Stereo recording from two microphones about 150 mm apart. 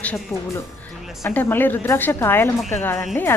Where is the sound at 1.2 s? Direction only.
15° left (ahead or behind).